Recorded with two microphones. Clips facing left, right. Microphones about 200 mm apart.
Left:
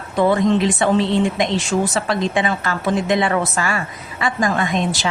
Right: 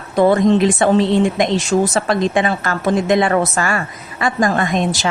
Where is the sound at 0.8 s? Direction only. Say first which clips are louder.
Right 3 dB; 45° right (ahead or behind).